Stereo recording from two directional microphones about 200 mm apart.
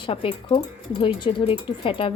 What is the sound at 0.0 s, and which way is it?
A woman's voice, 25° left (ahead or behind).